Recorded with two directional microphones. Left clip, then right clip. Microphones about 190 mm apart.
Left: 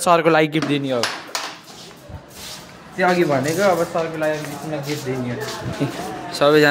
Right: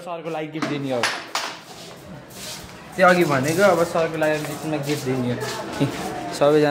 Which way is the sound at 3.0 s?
Centre (ahead or behind).